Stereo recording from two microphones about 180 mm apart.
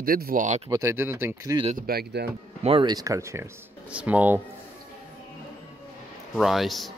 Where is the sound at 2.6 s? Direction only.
25° right (ahead or behind); by 4.4 s 10° right (ahead or behind).